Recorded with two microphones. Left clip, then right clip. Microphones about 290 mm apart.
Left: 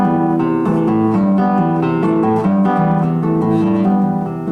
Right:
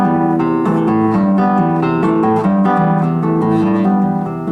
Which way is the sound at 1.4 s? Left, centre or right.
Centre.